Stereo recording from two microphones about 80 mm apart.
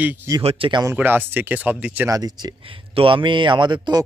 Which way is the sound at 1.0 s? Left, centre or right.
Right.